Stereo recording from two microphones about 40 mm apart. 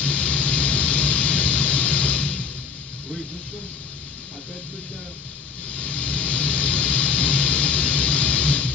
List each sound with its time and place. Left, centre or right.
0.0 s vehicle: left
5.7 s vehicle: left